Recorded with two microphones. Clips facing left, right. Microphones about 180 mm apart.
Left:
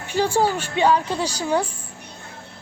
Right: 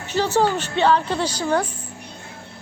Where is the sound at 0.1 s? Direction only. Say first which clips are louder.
Right 1 dB; 10° left (ahead or behind).